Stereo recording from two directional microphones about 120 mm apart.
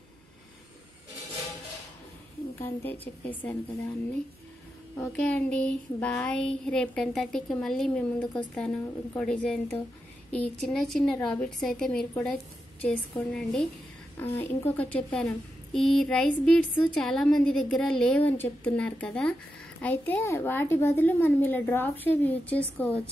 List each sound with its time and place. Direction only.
2.6 s a woman's voice: 15° left (ahead or behind)
5.1 s a woman's voice: 10° left (ahead or behind)
14.1 s a woman's voice: 15° left (ahead or behind)